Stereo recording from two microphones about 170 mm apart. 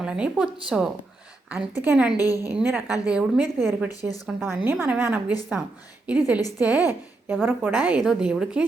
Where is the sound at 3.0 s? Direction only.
5° right (ahead or behind).